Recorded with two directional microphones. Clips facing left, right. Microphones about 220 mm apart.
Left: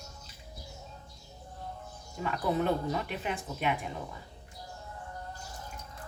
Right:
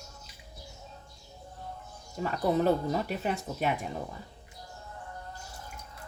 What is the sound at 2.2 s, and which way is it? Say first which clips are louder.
Speech: right 3 dB; 40° right (ahead or behind).